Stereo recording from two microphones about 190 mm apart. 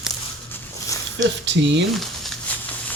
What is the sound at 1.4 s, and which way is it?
Speech, 70° right (ahead or behind).